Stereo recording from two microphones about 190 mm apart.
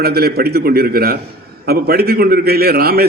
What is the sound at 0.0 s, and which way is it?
A man's voice, 55° right (ahead or behind).